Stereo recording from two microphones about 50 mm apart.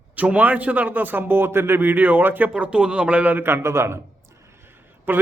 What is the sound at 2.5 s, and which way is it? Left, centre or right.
Speech, right.